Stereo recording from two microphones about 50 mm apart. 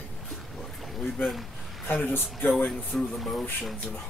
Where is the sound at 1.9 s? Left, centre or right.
Left.